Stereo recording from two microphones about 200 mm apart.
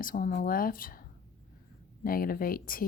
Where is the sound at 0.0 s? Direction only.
45° left (ahead or behind).